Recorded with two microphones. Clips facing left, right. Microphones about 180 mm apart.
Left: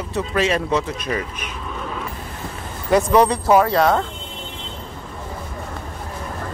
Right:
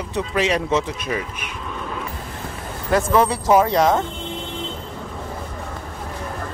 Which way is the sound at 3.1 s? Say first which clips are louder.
Left 2 dB; 5° right (ahead or behind).